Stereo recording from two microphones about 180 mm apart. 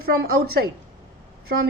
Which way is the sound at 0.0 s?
60° right (ahead or behind).